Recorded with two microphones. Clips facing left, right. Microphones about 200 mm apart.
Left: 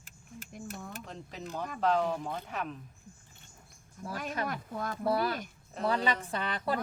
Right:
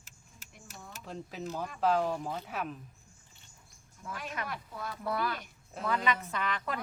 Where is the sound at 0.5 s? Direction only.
50° left (ahead or behind).